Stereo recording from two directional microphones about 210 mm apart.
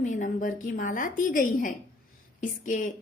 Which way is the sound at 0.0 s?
35° left (ahead or behind).